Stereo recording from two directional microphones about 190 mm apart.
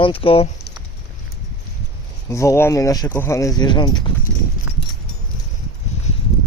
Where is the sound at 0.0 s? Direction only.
30° left (ahead or behind).